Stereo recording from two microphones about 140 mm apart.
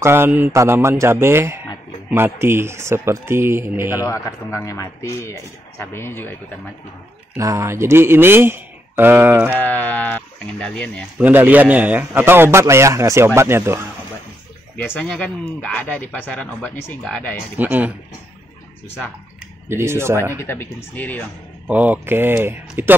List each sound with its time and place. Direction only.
0.0 s a man's voice: 15° right (ahead or behind)
4.0 s speech: 20° left (ahead or behind)
7.3 s a man's voice: 20° right (ahead or behind)
9.5 s speech: 15° left (ahead or behind)
11.1 s a man's voice: 10° right (ahead or behind)
14.8 s speech: 10° left (ahead or behind)
17.6 s a man's voice: 10° right (ahead or behind)
19.7 s a man's voice: 20° right (ahead or behind)
20.3 s speech: 15° left (ahead or behind)
21.6 s a man's voice: 10° right (ahead or behind)